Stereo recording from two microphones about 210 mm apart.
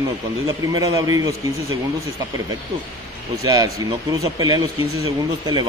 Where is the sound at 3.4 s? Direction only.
15° right (ahead or behind).